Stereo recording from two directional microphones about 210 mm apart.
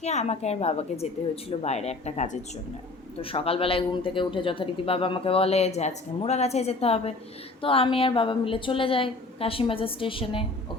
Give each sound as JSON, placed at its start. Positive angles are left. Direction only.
{"t": 0.0, "sound": "a woman's voice", "side_deg": 30}